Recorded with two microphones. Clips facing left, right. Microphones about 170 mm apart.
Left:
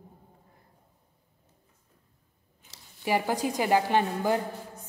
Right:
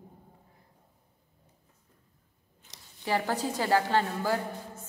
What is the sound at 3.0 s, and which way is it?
A woman's voice, 15° left (ahead or behind).